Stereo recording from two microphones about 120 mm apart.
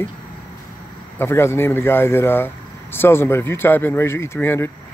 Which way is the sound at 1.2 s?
20° left (ahead or behind).